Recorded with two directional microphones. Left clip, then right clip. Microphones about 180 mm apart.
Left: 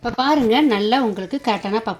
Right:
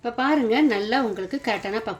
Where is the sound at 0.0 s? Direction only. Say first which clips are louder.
Left 4 dB; 35° left (ahead or behind).